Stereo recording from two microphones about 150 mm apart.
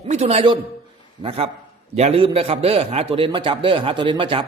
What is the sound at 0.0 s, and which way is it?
A man's voice, 45° right (ahead or behind).